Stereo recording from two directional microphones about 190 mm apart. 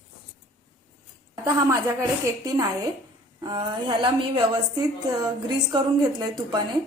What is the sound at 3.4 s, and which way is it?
A woman's voice, 20° right (ahead or behind).